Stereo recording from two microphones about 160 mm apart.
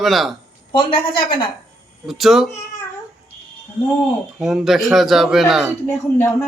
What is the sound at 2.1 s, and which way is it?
Speech, centre (ahead or behind).